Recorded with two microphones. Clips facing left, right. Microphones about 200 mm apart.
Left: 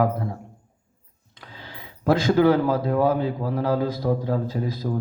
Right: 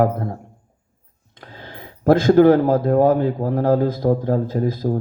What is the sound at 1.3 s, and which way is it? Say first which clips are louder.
Speech: right 4 dB; 50° right (ahead or behind).